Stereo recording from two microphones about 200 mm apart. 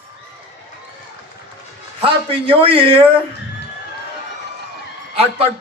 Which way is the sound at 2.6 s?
25° right (ahead or behind).